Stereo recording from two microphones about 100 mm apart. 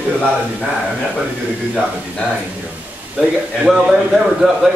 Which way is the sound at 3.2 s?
5° right (ahead or behind).